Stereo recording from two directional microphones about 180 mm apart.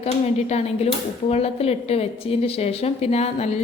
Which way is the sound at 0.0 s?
35° left (ahead or behind).